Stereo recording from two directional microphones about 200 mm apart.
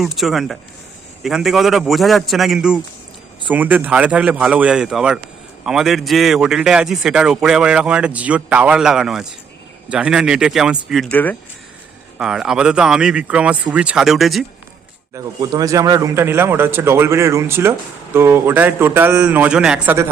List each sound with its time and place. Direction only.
0.0 s speech: centre (ahead or behind)
12.2 s speech: 5° right (ahead or behind)
15.1 s speech: 20° right (ahead or behind)